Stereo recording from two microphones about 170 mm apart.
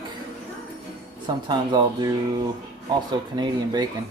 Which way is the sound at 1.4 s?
25° right (ahead or behind).